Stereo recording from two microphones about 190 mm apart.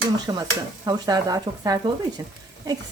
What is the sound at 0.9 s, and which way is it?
Speech, 20° right (ahead or behind).